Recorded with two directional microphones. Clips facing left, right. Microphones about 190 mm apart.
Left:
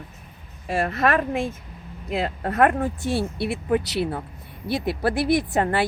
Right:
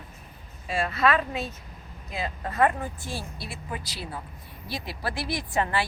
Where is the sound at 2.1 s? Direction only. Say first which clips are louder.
Left 7 dB; 65° left (ahead or behind).